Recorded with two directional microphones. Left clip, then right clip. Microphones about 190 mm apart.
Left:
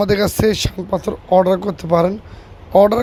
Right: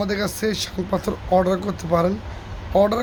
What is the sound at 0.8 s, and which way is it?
Speech, 25° left (ahead or behind).